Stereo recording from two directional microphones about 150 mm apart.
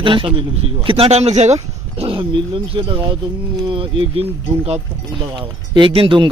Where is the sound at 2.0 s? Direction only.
35° right (ahead or behind).